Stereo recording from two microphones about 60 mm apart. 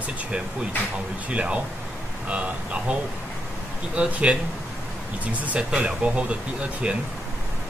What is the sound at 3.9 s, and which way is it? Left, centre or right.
Speech, centre.